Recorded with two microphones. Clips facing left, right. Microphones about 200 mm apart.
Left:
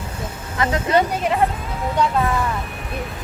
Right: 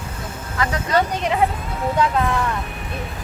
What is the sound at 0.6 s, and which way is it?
Speech, 25° left (ahead or behind).